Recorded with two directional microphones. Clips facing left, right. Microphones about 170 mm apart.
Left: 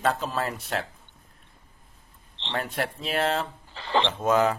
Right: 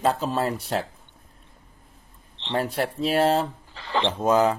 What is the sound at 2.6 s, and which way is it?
Speech, 30° right (ahead or behind).